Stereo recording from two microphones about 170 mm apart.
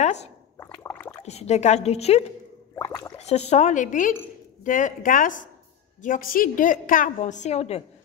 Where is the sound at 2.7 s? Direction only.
20° left (ahead or behind).